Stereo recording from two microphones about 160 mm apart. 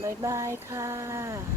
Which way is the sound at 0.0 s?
15° right (ahead or behind).